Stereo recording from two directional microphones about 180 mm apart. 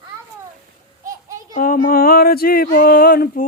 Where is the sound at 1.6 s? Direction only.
50° left (ahead or behind).